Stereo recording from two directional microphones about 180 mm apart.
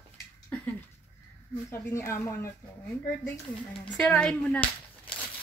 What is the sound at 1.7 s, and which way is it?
Speech, 15° left (ahead or behind).